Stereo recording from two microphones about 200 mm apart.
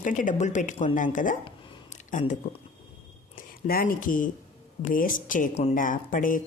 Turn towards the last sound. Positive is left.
turn(degrees=40)  # may be behind; listen again after turning